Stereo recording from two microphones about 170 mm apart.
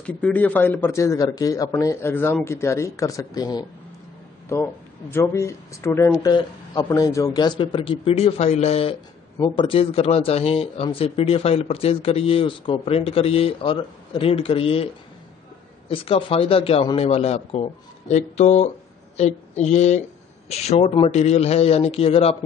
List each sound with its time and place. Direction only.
0.0 s a man's voice: 10° left (ahead or behind)
5.1 s a man's voice: 15° left (ahead or behind); by 14.9 s 35° left (ahead or behind)
15.9 s speech: 30° left (ahead or behind)